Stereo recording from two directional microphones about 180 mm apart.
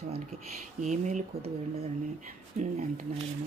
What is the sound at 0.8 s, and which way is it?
Speech, 45° right (ahead or behind).